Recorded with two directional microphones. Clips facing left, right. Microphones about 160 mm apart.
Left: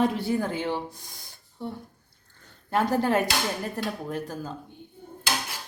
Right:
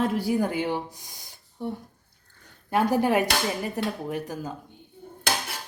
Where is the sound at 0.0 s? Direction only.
5° right (ahead or behind).